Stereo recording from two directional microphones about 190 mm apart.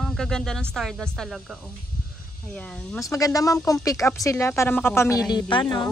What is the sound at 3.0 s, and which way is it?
Speech, 15° left (ahead or behind).